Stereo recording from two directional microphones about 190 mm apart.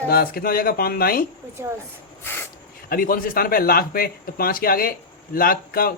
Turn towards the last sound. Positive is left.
turn(degrees=50)  # may be behind; listen again after turning